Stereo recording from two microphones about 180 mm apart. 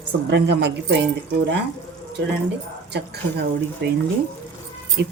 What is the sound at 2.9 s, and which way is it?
Speech, 65° right (ahead or behind).